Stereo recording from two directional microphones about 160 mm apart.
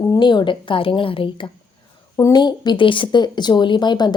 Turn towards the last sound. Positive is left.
turn(degrees=30)  # may be behind; listen again after turning